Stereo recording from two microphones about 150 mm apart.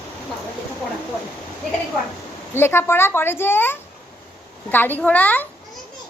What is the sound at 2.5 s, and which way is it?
A child's voice, 15° left (ahead or behind).